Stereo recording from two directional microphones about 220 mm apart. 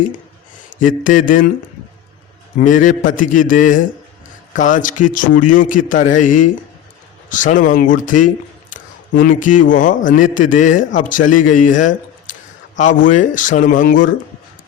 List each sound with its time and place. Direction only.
0.8 s a man's voice: 35° left (ahead or behind)
2.6 s a man's voice: 35° left (ahead or behind)